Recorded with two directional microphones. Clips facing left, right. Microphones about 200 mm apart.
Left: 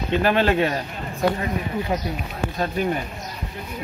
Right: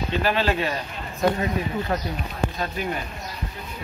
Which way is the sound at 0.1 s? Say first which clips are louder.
Left 5 dB; 55° left (ahead or behind).